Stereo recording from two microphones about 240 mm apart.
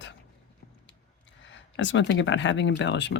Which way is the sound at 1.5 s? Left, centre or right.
Left.